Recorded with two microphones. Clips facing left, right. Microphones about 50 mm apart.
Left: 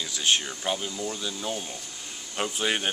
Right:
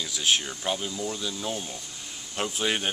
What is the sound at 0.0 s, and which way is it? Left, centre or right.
Speech, centre.